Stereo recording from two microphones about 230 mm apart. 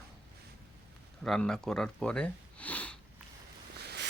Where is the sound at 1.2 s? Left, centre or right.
Centre.